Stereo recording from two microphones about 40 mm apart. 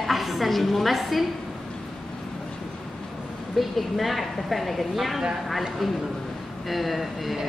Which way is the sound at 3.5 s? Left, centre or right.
Centre.